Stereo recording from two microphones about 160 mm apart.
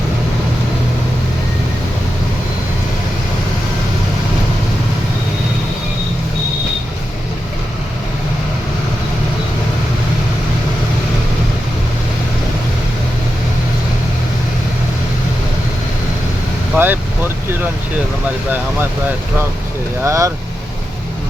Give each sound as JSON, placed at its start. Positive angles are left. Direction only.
{"t": 16.7, "sound": "vehicle", "side_deg": -10}
{"t": 20.1, "sound": "speech", "side_deg": -20}